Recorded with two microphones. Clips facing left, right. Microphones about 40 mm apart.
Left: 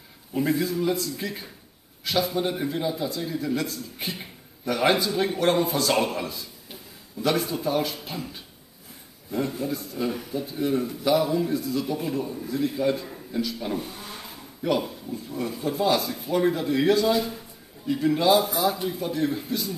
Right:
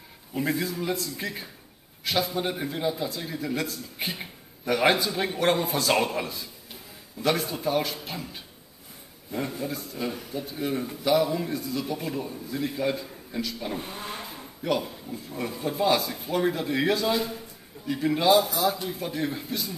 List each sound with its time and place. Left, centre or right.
0.3 s a man's voice: centre
13.7 s speech: right
14.6 s speech: centre
15.0 s a man's voice: centre
18.4 s a man's voice: centre